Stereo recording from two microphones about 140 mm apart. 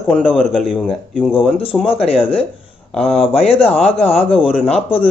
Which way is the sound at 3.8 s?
45° left (ahead or behind).